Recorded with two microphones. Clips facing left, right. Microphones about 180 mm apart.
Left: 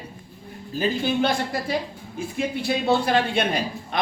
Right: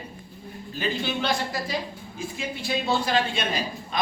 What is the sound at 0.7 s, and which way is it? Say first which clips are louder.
A woman's voice: left 5 dB; 45° left (ahead or behind).